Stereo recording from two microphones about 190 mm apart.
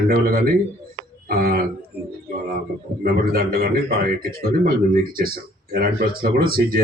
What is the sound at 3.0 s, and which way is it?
A man's voice, 50° right (ahead or behind).